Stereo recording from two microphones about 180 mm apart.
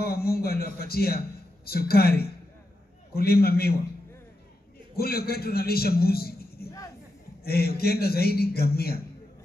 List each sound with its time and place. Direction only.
0.0 s a man's voice: 60° left (ahead or behind)
4.9 s a man's voice: 60° left (ahead or behind)